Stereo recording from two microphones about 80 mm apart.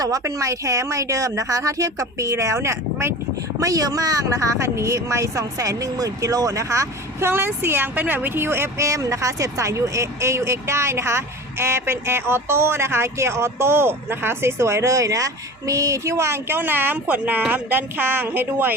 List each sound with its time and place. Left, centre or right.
0.2 s speech: right
3.6 s speech: right